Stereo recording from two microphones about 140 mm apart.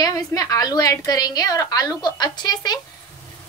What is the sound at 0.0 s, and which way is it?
A woman's voice, 25° left (ahead or behind).